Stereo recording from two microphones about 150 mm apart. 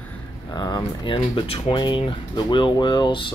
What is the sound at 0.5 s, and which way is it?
Speech, 25° left (ahead or behind).